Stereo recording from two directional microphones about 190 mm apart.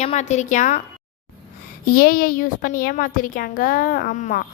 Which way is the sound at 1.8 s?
50° left (ahead or behind).